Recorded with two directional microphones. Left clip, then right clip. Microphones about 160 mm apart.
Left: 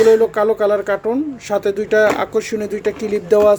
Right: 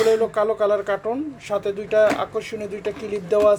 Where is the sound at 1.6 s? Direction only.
30° left (ahead or behind).